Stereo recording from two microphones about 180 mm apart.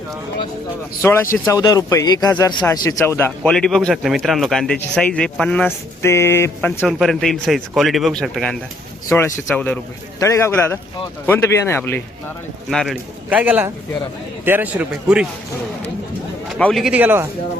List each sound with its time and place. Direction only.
1.0 s speech: 15° left (ahead or behind)
9.0 s speech: 15° left (ahead or behind)
10.2 s speech: 15° left (ahead or behind)
12.7 s a man's voice: centre (ahead or behind)
16.6 s speech: 5° left (ahead or behind)